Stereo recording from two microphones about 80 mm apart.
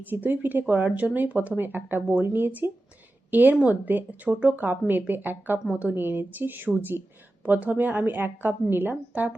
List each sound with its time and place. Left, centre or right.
0.0 s speech: right